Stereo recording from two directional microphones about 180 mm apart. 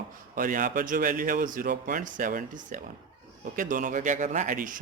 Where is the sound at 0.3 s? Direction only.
50° right (ahead or behind).